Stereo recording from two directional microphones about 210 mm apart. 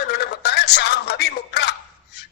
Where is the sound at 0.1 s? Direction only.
50° left (ahead or behind).